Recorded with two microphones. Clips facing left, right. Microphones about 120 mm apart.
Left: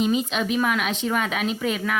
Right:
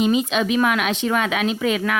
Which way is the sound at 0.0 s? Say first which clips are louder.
Right 4 dB; 90° right.